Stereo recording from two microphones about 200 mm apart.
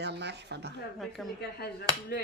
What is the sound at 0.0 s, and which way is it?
Speech, 55° right (ahead or behind).